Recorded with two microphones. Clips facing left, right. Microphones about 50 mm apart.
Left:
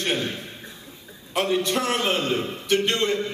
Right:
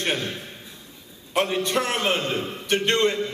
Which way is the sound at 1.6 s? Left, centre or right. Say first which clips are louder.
Even; right.